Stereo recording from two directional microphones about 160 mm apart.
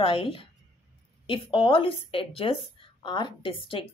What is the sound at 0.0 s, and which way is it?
A woman's voice, 35° left (ahead or behind).